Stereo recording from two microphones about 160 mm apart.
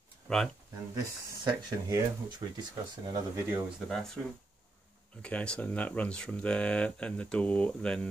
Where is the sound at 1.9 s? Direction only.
20° right (ahead or behind).